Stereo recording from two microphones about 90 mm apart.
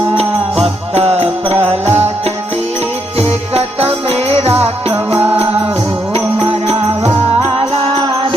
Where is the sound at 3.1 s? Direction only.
90° right.